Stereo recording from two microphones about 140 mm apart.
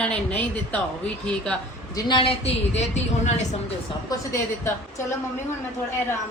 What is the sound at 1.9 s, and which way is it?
A woman's voice, 30° left (ahead or behind).